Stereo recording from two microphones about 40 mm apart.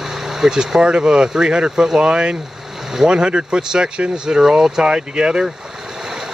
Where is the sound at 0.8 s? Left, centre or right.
Right.